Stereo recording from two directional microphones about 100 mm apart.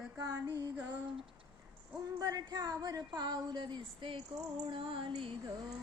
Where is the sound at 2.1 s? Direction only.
40° right (ahead or behind); by 5.3 s 60° right (ahead or behind).